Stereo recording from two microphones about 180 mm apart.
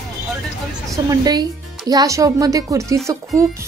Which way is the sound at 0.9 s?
20° right (ahead or behind).